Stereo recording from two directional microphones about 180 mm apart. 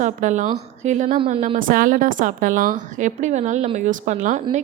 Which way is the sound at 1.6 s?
50° right (ahead or behind).